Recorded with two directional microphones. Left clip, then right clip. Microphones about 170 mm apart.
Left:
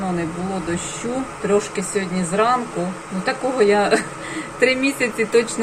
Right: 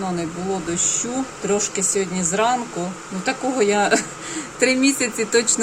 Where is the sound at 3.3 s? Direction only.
20° right (ahead or behind).